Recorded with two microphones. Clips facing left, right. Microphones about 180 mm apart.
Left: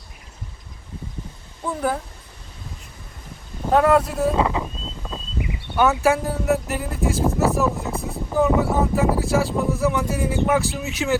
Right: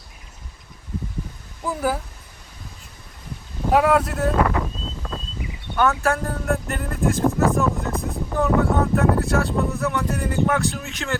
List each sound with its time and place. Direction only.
1.6 s speech: 5° right (ahead or behind)
3.6 s speech: 5° right (ahead or behind)
4.4 s speech: 20° left (ahead or behind)
4.6 s wind noise: 5° left (ahead or behind)
5.7 s speech: 5° left (ahead or behind)